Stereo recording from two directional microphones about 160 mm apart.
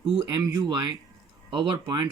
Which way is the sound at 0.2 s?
25° right (ahead or behind).